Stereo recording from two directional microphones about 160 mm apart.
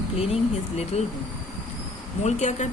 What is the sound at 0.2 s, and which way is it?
Speech, 40° left (ahead or behind).